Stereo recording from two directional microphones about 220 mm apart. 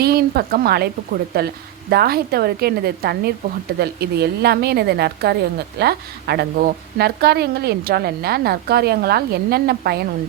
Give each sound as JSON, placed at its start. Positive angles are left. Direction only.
{"t": 0.0, "sound": "a woman's voice", "side_deg": -45}